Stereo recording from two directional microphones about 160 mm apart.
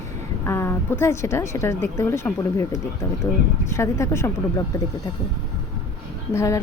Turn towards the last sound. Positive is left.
turn(degrees=20)  # may be behind; listen again after turning